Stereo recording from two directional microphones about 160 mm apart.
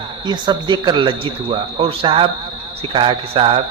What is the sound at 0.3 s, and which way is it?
A man's voice, 30° right (ahead or behind).